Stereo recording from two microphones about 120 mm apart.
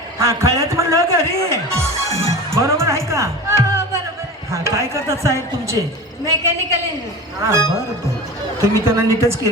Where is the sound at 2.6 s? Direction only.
25° right (ahead or behind).